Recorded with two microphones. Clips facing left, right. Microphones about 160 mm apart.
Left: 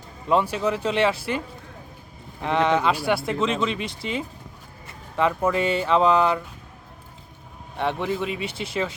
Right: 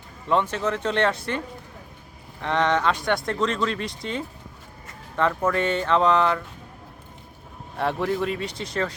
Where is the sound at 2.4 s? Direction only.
5° left (ahead or behind).